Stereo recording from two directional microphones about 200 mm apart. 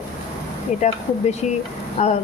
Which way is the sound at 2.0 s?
35° left (ahead or behind).